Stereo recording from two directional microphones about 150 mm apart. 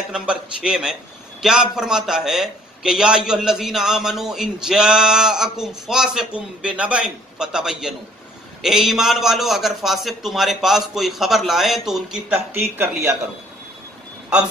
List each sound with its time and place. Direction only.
0.1 s a man's voice: 5° right (ahead or behind)
12.5 s speech: 15° right (ahead or behind)